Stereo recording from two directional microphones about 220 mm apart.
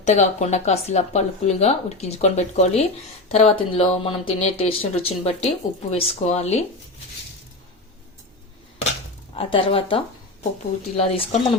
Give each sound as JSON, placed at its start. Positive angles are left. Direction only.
{"t": 0.0, "sound": "speech", "side_deg": 30}
{"t": 9.3, "sound": "speech", "side_deg": 25}